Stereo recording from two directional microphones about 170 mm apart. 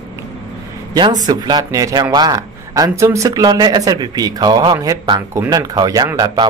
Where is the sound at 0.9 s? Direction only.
25° right (ahead or behind).